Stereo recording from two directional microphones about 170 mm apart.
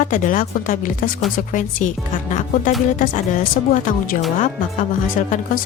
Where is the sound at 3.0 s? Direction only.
50° left (ahead or behind).